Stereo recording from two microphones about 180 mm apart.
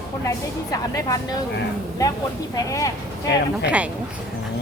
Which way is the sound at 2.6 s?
20° left (ahead or behind).